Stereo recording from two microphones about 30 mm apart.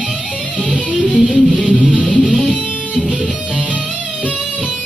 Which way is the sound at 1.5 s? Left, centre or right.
Right.